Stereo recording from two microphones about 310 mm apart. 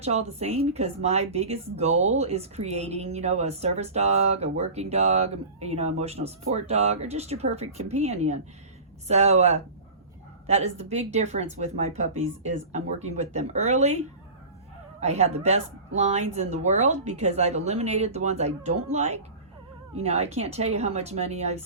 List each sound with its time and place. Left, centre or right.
0.0 s speech: right
15.0 s speech: right